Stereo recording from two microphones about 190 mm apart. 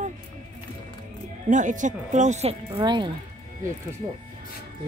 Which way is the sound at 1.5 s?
40° right (ahead or behind).